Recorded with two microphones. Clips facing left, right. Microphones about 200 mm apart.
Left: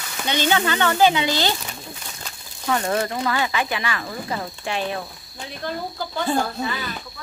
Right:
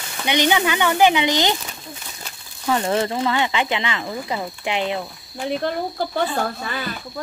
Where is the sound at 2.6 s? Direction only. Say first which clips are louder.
Right 2 dB; 25° right (ahead or behind).